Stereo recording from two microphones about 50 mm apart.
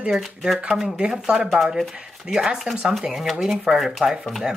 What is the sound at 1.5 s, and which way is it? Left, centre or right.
Speech, centre.